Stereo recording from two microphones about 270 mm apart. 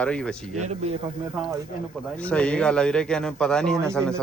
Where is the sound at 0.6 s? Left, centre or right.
Right.